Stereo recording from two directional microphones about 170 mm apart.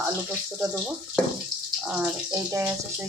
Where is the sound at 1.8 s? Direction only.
10° right (ahead or behind).